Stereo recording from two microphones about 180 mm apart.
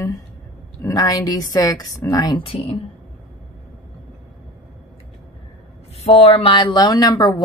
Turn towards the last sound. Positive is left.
turn(degrees=20)  # may be behind; listen again after turning